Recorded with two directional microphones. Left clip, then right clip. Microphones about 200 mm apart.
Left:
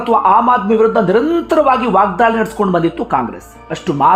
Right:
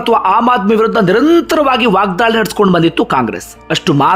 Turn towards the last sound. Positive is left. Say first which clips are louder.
# right 1 dB
turn(degrees=-25)  # may be behind; listen again after turning